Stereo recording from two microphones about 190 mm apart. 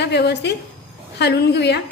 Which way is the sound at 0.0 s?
65° left (ahead or behind).